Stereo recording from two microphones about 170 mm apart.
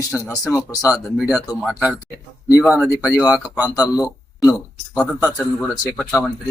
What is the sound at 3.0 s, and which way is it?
Speech, 5° right (ahead or behind).